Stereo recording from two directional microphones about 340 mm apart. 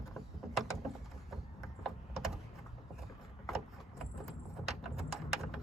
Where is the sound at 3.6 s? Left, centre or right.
Centre.